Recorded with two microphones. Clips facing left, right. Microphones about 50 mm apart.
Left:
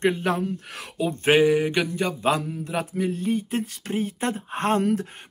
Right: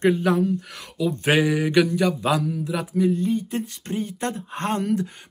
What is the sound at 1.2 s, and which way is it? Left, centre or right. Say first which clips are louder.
Speech: left 3 dB; centre.